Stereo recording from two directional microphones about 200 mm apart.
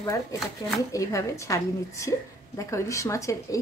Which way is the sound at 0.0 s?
15° left (ahead or behind).